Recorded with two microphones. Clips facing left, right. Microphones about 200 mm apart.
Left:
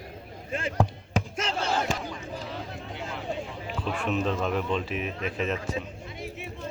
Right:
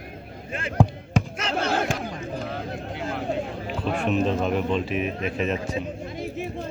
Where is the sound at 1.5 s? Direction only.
60° right (ahead or behind).